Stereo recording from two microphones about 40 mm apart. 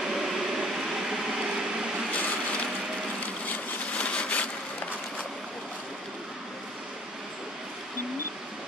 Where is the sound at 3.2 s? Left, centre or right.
Left.